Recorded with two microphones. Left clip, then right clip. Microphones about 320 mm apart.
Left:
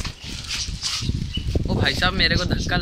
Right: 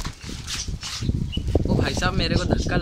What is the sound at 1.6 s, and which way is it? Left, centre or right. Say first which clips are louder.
Speech: left 6 dB; centre.